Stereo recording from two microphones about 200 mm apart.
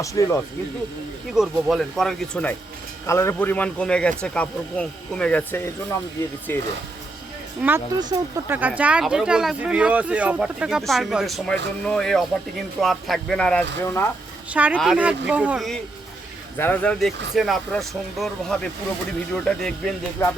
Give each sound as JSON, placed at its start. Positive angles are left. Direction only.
{"t": 0.0, "sound": "speech", "side_deg": 15}
{"t": 1.3, "sound": "speech", "side_deg": 0}
{"t": 7.9, "sound": "speech", "side_deg": -20}
{"t": 8.5, "sound": "speech", "side_deg": -10}
{"t": 14.5, "sound": "speech", "side_deg": -5}